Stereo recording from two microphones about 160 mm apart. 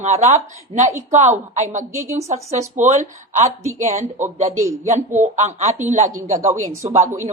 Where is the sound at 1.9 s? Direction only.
15° right (ahead or behind).